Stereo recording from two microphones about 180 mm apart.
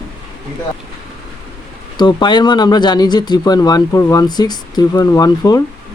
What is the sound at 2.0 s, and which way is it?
Speech, 25° left (ahead or behind).